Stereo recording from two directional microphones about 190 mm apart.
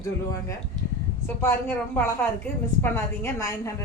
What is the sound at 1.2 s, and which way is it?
A woman's voice, 15° left (ahead or behind).